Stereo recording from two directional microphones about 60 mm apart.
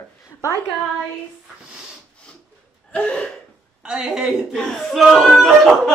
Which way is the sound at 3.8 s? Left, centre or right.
Centre.